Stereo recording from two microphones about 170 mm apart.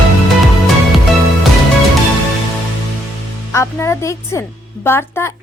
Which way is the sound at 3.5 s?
15° left (ahead or behind).